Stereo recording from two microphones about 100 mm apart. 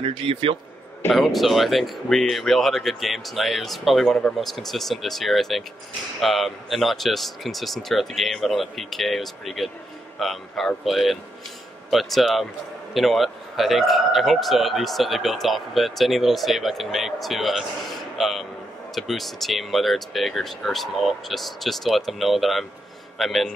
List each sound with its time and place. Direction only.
0.0 s speech: 70° right (ahead or behind)
1.1 s a man's voice: centre (ahead or behind)